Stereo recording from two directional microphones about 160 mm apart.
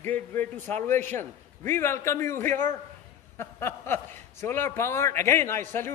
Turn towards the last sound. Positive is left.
turn(degrees=15)  # may be behind; listen again after turning